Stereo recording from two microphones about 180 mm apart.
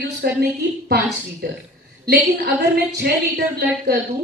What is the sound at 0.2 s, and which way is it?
Speech, 60° right (ahead or behind).